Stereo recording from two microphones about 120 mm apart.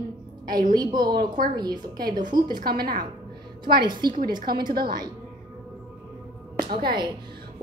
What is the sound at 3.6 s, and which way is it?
A woman's voice, 40° right (ahead or behind).